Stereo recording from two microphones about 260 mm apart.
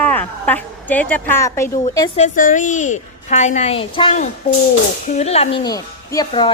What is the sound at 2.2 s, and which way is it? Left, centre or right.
A woman's voice, left.